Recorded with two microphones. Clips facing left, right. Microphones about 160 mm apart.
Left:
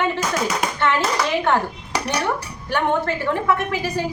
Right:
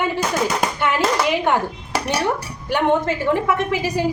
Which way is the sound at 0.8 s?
15° right (ahead or behind).